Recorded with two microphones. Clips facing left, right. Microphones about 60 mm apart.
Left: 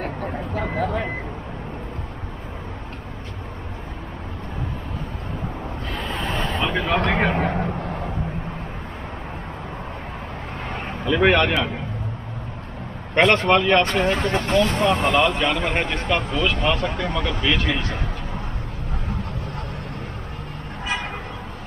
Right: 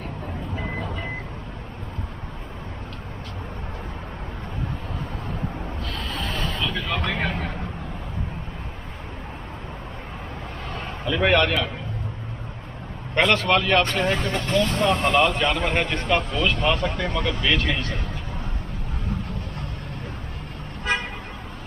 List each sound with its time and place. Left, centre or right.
0.0 s vehicle: left
6.2 s a sound: centre
6.6 s vehicle: left
7.5 s a sound: left
11.1 s speech: centre
13.3 s speech: left
14.0 s speech: centre